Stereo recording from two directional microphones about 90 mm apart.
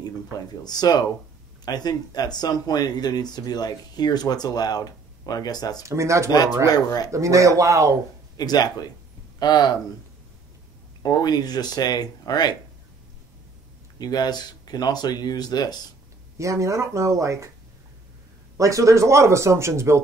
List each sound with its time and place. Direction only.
0.7 s speech: 50° left (ahead or behind)
5.9 s speech: 35° right (ahead or behind)
6.7 s speech: 45° left (ahead or behind)
7.1 s speech: 35° right (ahead or behind)
8.4 s speech: 45° left (ahead or behind)
11.0 s speech: 45° left (ahead or behind)
13.9 s speech: 50° left (ahead or behind)
16.3 s speech: 35° right (ahead or behind)
18.6 s speech: 35° right (ahead or behind)